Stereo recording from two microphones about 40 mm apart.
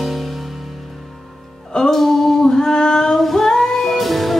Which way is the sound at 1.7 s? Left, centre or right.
Centre.